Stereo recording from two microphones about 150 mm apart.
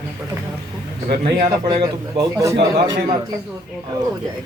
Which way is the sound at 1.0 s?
90° right.